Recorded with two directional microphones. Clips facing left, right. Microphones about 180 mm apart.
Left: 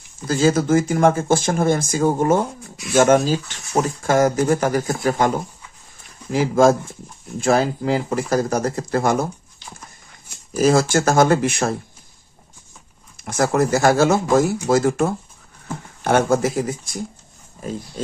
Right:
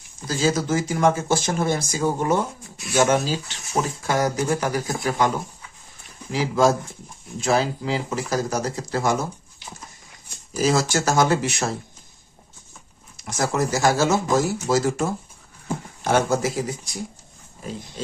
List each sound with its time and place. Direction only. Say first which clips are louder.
0.3 s speech: left 5 dB; 55° left (ahead or behind)
6.3 s speech: left 4 dB; 50° left (ahead or behind)
10.6 s speech: left 5 dB; 55° left (ahead or behind)
13.1 s speech: left 5 dB; 55° left (ahead or behind)